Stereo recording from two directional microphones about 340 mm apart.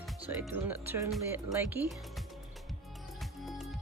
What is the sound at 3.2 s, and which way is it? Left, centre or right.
Music, centre.